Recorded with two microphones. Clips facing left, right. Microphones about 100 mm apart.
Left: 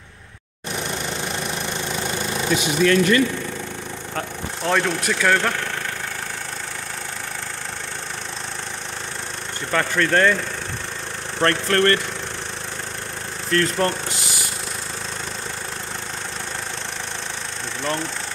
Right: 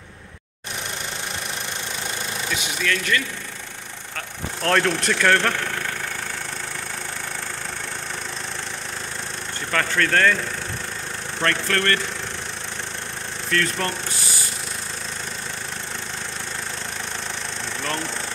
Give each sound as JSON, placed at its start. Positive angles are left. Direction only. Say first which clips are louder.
{"t": 2.5, "sound": "speech", "louder": "left 9 dB", "side_deg": 30}
{"t": 4.6, "sound": "speech", "louder": "right 1 dB", "side_deg": 5}
{"t": 9.7, "sound": "speech", "louder": "left 2 dB", "side_deg": 15}
{"t": 11.4, "sound": "speech", "louder": "left 4 dB", "side_deg": 30}
{"t": 13.5, "sound": "speech", "louder": "left 4 dB", "side_deg": 30}